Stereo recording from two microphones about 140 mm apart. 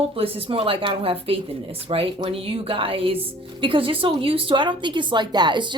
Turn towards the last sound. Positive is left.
turn(degrees=-35)  # may be behind; listen again after turning